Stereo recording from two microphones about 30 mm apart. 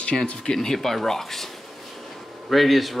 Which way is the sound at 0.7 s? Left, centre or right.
Centre.